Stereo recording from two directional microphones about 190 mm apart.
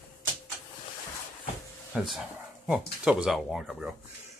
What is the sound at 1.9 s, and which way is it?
Speech, 5° right (ahead or behind).